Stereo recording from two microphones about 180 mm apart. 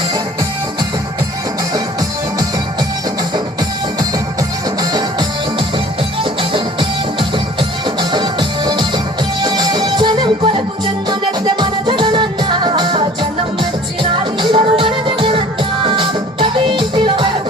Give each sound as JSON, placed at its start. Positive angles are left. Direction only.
{"t": 4.8, "sound": "music", "side_deg": -20}
{"t": 6.5, "sound": "music", "side_deg": -30}